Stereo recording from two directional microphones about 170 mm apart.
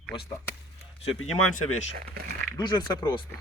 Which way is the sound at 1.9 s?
65° right (ahead or behind).